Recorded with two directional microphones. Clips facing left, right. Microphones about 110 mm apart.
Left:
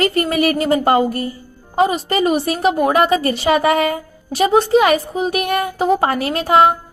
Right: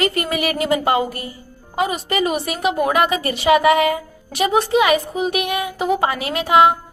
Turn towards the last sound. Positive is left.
turn(degrees=40)  # may be behind; listen again after turning